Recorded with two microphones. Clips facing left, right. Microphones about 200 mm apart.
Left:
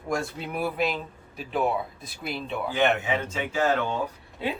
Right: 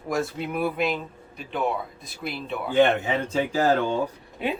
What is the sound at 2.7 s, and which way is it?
Speech, 30° right (ahead or behind).